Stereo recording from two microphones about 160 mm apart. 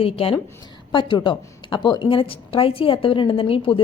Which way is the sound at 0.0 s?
35° left (ahead or behind).